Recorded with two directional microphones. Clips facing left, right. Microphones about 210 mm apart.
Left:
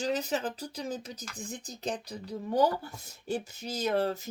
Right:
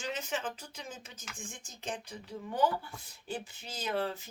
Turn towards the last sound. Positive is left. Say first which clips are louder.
# left 6 dB
turn(degrees=40)  # may be behind; listen again after turning